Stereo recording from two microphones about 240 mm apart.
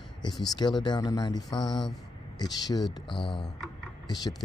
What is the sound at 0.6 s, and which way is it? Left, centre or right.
Speech, centre.